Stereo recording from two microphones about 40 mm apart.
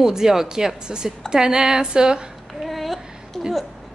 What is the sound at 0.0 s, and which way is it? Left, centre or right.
A woman's voice, centre.